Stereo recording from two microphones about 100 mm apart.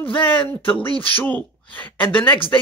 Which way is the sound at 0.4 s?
60° left (ahead or behind).